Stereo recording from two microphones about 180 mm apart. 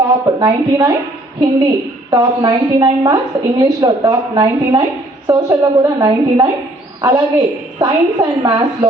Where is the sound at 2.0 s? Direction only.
20° right (ahead or behind).